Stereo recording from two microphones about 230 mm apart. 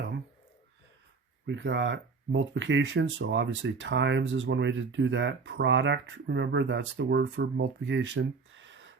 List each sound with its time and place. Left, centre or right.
1.5 s speech: right